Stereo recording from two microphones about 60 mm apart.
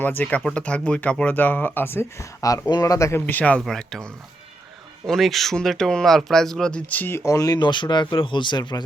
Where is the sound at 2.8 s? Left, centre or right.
Left.